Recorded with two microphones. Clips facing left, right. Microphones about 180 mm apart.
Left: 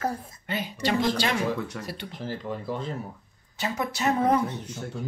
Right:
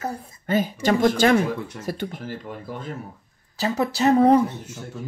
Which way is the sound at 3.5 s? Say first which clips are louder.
Right 6 dB; 35° right (ahead or behind).